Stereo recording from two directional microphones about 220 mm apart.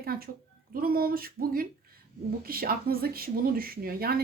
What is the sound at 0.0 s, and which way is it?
A woman's voice, 45° right (ahead or behind).